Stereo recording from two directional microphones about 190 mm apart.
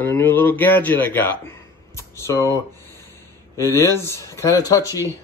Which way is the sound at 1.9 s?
15° left (ahead or behind).